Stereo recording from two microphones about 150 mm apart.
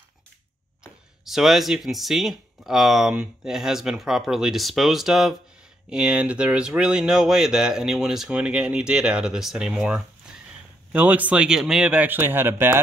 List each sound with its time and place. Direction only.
1.2 s speech: centre (ahead or behind)